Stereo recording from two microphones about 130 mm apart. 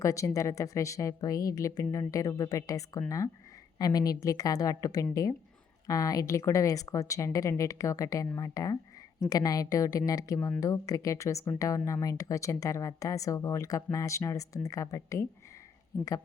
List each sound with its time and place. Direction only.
0.0 s speech: 25° left (ahead or behind)